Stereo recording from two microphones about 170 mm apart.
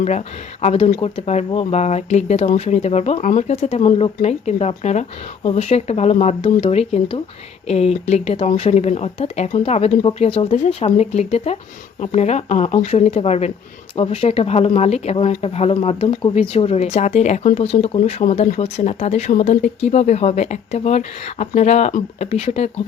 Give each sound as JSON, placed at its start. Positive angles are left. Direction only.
{"t": 0.6, "sound": "speech", "side_deg": 40}